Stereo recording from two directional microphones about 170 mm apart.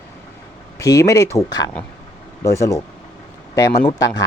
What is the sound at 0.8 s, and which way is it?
Speech, 20° left (ahead or behind).